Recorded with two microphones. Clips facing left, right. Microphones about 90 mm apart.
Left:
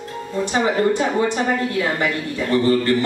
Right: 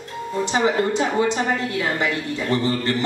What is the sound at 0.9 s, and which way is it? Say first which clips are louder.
Speech: left 1 dB; 20° right (ahead or behind).